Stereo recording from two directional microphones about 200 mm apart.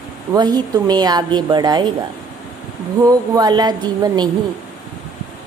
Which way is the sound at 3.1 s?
20° right (ahead or behind).